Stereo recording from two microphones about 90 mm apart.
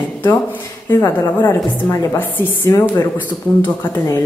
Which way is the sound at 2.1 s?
20° left (ahead or behind).